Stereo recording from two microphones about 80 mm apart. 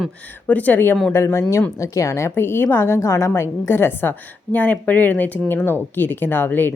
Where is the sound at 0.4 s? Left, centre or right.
Left.